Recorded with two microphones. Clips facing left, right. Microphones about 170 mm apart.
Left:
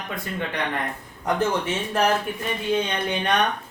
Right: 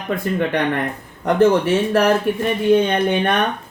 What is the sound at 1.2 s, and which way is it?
Speech, 65° right (ahead or behind).